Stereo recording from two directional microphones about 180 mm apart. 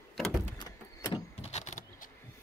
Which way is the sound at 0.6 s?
25° left (ahead or behind).